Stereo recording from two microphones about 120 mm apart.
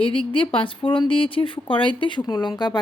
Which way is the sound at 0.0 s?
50° left (ahead or behind).